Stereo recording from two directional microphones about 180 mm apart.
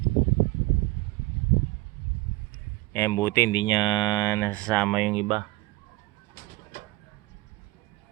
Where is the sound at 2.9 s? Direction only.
10° left (ahead or behind).